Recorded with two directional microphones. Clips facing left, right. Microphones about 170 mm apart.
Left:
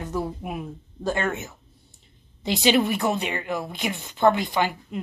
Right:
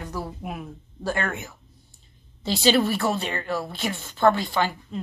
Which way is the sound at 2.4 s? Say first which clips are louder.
Even; 20° left (ahead or behind).